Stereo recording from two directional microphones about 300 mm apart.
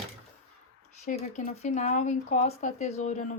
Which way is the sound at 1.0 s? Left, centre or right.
Left.